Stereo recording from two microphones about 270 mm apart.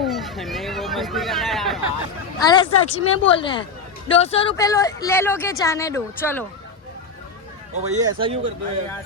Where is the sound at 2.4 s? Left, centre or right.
Centre.